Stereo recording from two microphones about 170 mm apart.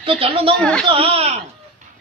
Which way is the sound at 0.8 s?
35° right (ahead or behind).